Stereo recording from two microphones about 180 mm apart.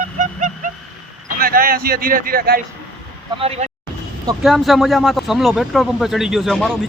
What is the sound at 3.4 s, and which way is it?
Speech, 35° right (ahead or behind).